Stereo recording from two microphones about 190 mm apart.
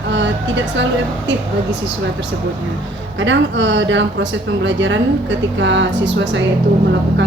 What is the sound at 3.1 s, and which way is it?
Speech, 75° right (ahead or behind).